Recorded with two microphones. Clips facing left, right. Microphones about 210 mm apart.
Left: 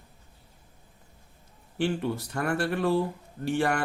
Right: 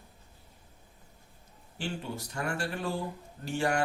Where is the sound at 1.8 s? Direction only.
60° left (ahead or behind).